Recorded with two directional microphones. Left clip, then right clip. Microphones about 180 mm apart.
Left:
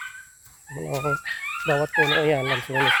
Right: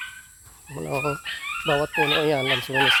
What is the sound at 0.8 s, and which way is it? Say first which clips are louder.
Speech: even; 35° right (ahead or behind).